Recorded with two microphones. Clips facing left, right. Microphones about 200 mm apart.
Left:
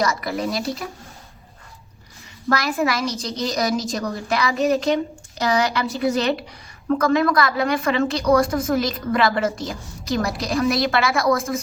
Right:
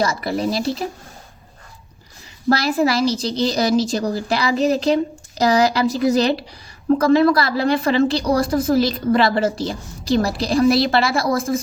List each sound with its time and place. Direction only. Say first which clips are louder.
0.0 s speech: right 2 dB; 30° right (ahead or behind)
2.5 s a woman's voice: right 4 dB; 30° right (ahead or behind)